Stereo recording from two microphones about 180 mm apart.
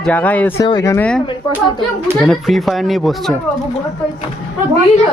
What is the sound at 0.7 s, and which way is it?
Speech, 20° left (ahead or behind).